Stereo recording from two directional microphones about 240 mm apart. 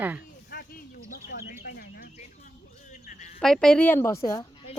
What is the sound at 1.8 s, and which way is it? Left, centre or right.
Chicken, left.